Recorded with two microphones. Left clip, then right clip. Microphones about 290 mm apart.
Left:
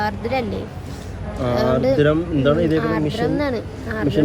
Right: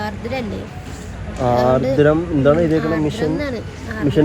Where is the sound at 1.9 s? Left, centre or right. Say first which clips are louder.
Right 3 dB; centre.